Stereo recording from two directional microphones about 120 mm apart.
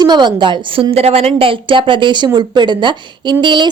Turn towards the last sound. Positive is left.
turn(degrees=-40)  # may be behind; listen again after turning